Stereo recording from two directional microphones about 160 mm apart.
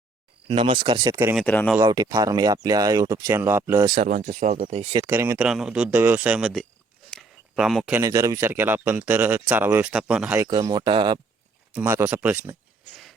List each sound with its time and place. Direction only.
0.4 s speech: 35° right (ahead or behind)
1.5 s speech: 10° left (ahead or behind)
1.8 s speech: 25° right (ahead or behind)
3.9 s speech: 45° right (ahead or behind)
5.0 s speech: 15° right (ahead or behind)
5.4 s speech: 5° right (ahead or behind)
7.1 s a sound: centre (ahead or behind)
7.9 s speech: 20° right (ahead or behind)
10.3 s speech: 20° right (ahead or behind)
11.7 s speech: 10° right (ahead or behind)